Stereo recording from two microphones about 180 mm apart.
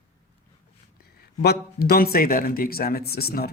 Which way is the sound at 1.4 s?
60° left (ahead or behind).